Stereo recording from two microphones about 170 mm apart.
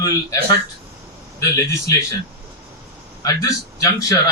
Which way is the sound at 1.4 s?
20° left (ahead or behind).